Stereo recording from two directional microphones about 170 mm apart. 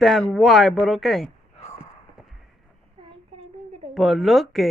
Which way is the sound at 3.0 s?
35° right (ahead or behind).